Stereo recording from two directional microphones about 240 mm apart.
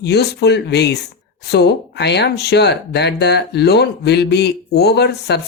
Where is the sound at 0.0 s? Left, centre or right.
Left.